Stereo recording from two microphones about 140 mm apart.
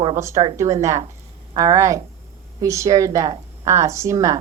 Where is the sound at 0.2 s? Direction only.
20° right (ahead or behind).